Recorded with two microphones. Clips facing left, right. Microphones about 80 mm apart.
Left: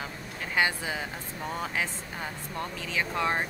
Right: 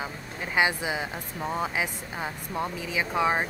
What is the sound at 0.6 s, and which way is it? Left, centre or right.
Speech, centre.